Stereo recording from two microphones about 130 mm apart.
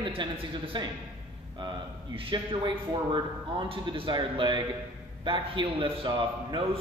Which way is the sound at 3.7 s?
40° right (ahead or behind).